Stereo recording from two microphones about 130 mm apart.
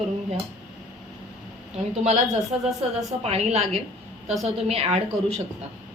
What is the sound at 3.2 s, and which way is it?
A woman's voice, 55° right (ahead or behind).